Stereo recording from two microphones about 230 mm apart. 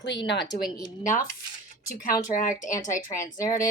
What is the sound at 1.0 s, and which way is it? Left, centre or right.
Speech, left.